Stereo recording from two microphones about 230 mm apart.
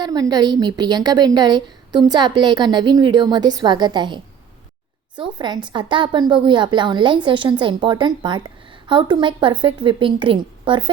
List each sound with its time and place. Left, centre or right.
0.0 s a woman's voice: centre